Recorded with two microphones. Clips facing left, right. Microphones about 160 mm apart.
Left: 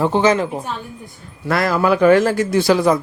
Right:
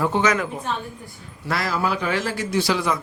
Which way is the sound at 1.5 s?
55° left (ahead or behind).